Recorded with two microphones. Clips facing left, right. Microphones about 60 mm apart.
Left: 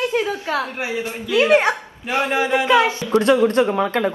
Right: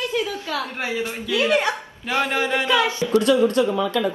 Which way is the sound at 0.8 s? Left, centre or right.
Left.